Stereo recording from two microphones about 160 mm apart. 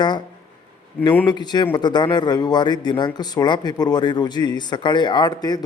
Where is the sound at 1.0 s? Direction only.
10° left (ahead or behind).